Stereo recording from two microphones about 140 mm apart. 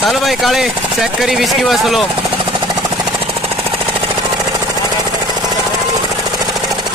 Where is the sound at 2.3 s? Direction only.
30° right (ahead or behind).